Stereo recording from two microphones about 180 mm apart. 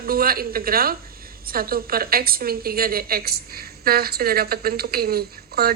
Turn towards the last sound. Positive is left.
turn(degrees=-60)  # may be behind; listen again after turning